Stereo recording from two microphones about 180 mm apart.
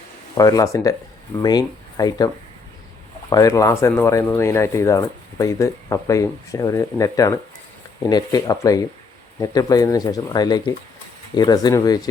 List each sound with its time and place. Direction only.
0.3 s speech: 20° left (ahead or behind)